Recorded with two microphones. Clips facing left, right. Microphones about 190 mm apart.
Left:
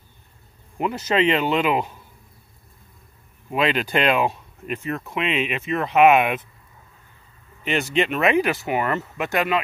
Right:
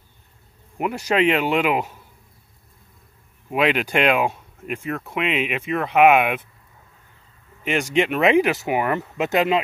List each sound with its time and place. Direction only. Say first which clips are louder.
0.7 s speech: right 1 dB; 10° right (ahead or behind)
3.4 s speech: right 2 dB; 10° right (ahead or behind)
7.6 s speech: right 1 dB; 15° right (ahead or behind)